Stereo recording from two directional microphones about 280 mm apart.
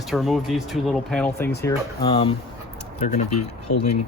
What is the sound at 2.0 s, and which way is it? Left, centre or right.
Speech, centre.